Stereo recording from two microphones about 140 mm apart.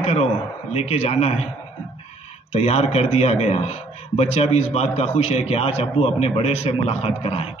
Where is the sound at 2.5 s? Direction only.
50° left (ahead or behind).